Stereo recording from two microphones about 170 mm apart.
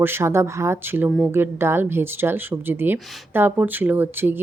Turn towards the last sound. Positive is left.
turn(degrees=-10)  # may be behind; listen again after turning